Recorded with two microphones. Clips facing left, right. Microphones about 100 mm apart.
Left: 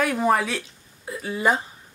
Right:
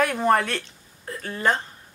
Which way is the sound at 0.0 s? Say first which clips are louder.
Right 1 dB; centre (ahead or behind).